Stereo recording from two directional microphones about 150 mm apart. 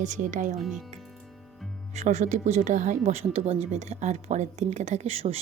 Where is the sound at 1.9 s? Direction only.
50° right (ahead or behind).